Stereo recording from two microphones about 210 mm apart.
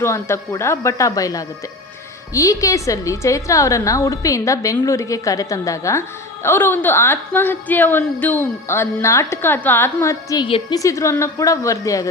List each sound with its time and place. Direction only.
0.0 s a woman's voice: 15° left (ahead or behind)